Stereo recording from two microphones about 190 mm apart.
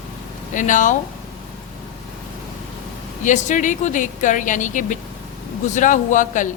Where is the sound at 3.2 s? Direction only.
40° left (ahead or behind).